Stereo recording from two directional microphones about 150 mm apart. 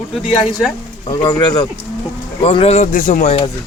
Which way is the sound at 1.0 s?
30° left (ahead or behind).